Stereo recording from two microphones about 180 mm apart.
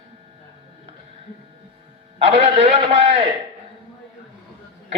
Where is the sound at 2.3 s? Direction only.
35° right (ahead or behind).